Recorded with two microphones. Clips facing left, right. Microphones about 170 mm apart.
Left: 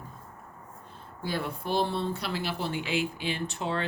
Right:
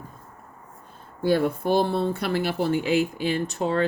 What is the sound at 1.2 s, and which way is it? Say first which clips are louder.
Speech: right 11 dB; 55° right (ahead or behind).